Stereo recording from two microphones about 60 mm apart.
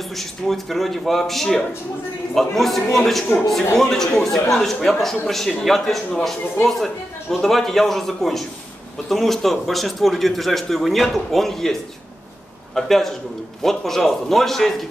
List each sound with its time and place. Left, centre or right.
0.1 s speech: centre